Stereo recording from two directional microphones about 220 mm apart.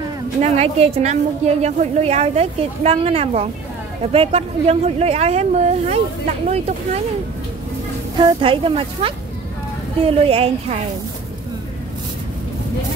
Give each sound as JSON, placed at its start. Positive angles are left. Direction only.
{"t": 0.4, "sound": "a woman's voice", "side_deg": -30}
{"t": 8.2, "sound": "a woman's voice", "side_deg": -20}